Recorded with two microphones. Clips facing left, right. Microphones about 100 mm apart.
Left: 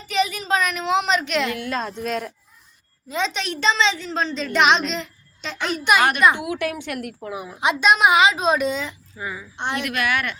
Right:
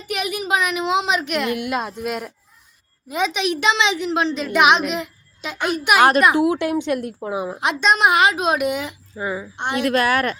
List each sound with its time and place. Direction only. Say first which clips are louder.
0.1 s a woman's voice: left 1 dB; 15° right (ahead or behind)
6.0 s a woman's voice: right 8 dB; 30° right (ahead or behind)
7.6 s speech: left 1 dB; centre (ahead or behind); by 9.0 s 15° right (ahead or behind)
9.1 s a woman's voice: right 8 dB; 30° right (ahead or behind)